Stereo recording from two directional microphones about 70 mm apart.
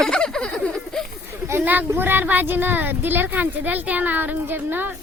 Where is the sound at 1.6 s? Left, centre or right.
Right.